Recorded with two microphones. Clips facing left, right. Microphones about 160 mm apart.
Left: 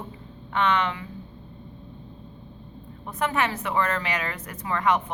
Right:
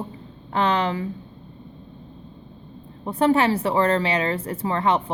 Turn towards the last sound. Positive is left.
turn(degrees=-30)  # may be behind; listen again after turning